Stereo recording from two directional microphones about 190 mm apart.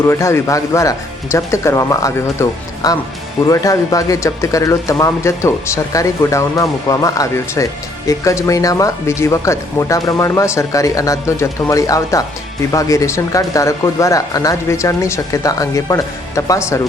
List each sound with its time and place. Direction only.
0.1 s speech: 15° left (ahead or behind)